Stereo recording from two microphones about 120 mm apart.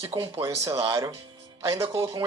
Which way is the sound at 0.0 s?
35° right (ahead or behind).